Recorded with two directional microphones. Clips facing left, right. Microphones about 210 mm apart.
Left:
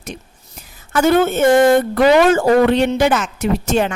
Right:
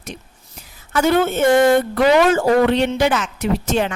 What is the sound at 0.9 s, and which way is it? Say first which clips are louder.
Speech: left 3 dB; 45° left (ahead or behind).